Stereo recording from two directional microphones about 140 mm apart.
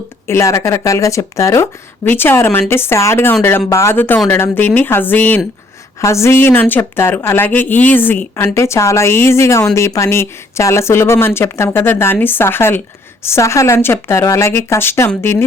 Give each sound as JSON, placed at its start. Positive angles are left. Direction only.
{"t": 0.3, "sound": "speech", "side_deg": 20}